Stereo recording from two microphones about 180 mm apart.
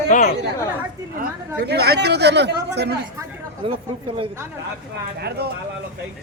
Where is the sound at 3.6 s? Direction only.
30° right (ahead or behind).